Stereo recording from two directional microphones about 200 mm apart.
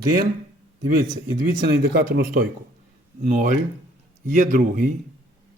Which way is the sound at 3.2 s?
40° right (ahead or behind).